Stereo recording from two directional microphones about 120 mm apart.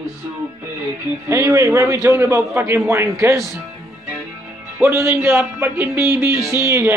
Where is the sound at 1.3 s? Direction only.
25° right (ahead or behind).